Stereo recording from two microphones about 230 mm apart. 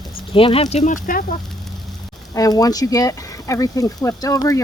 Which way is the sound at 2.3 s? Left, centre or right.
Centre.